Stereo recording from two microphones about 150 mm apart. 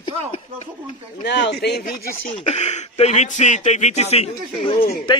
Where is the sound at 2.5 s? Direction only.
50° left (ahead or behind).